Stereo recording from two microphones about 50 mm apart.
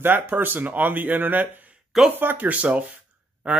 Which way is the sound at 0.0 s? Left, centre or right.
Right.